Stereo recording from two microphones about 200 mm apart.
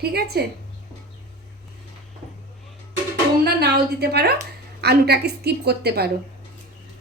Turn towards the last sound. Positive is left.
turn(degrees=-50)  # may be behind; listen again after turning